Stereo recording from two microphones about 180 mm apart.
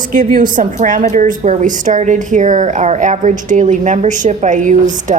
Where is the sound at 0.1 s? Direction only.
50° right (ahead or behind).